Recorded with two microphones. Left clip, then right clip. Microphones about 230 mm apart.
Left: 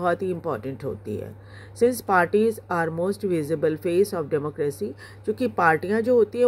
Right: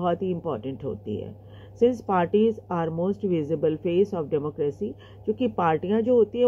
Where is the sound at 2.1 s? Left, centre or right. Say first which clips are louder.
Left 2 dB; left.